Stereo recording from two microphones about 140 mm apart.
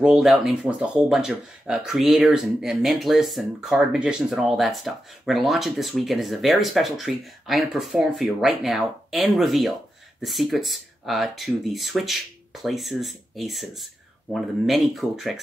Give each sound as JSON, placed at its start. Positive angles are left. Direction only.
{"t": 0.0, "sound": "speech", "side_deg": -5}